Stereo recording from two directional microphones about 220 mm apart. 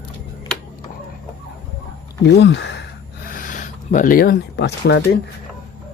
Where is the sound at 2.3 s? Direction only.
55° left (ahead or behind).